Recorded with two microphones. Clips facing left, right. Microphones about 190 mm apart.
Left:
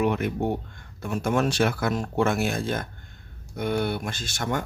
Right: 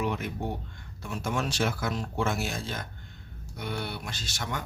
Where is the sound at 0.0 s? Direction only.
60° left (ahead or behind).